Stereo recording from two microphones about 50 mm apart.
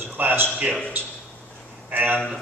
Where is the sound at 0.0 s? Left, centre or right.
Right.